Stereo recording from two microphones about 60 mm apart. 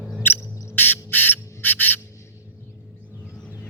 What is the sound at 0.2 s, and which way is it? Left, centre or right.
Owl, left.